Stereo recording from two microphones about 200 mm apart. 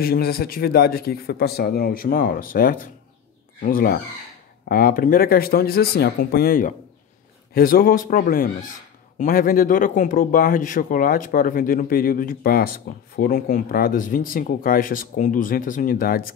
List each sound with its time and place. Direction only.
0.0 s speech: 50° left (ahead or behind)